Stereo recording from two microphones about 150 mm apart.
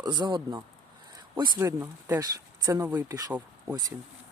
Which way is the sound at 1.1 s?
30° right (ahead or behind).